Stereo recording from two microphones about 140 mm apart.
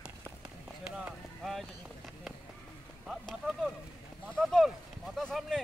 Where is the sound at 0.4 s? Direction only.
5° right (ahead or behind).